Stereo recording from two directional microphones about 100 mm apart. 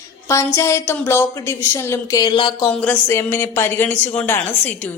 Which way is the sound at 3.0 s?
25° left (ahead or behind).